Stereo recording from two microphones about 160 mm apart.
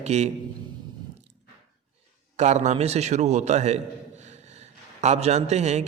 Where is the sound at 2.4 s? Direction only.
45° right (ahead or behind).